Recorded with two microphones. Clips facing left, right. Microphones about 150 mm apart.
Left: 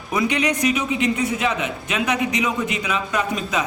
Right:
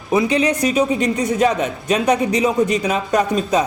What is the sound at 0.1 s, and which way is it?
A man's voice, 30° right (ahead or behind).